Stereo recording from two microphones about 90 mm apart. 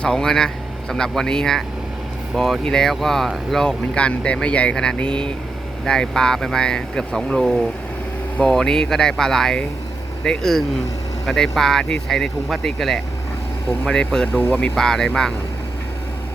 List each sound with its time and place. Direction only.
0.0 s speech: 5° left (ahead or behind)
14.4 s speech: 20° left (ahead or behind)
14.8 s speech: 5° left (ahead or behind)